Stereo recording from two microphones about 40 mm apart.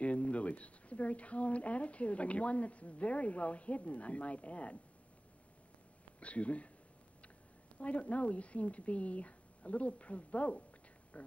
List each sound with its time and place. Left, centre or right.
0.0 s speech: left
6.1 s speech: left
7.8 s speech: left